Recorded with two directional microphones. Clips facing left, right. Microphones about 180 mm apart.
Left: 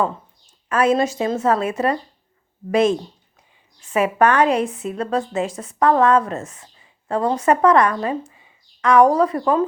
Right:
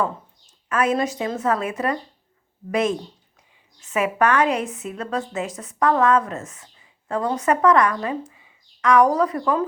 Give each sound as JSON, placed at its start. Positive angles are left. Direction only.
{"t": 0.7, "sound": "a woman's voice", "side_deg": 30}